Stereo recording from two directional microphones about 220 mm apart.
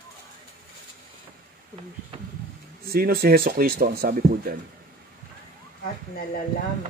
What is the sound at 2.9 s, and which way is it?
Speech, 45° right (ahead or behind).